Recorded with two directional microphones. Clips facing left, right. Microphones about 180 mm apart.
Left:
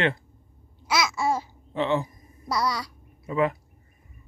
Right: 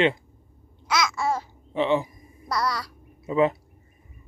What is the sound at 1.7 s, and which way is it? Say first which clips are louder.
Speech: right 2 dB; 15° right (ahead or behind).